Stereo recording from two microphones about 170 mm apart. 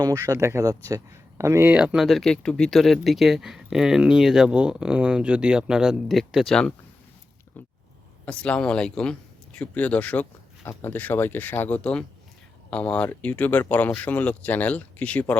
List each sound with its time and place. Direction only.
0.0 s speech: 20° right (ahead or behind); by 6.7 s 5° left (ahead or behind)
8.2 s speech: 5° left (ahead or behind)